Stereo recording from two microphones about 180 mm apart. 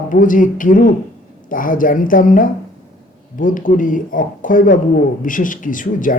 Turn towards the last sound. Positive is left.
turn(degrees=45)  # may be behind; listen again after turning